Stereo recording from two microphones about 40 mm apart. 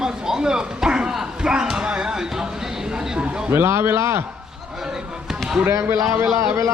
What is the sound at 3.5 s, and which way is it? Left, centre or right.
Speech, right.